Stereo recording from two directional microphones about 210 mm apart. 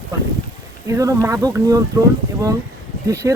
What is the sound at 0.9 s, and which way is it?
Speech, 15° right (ahead or behind).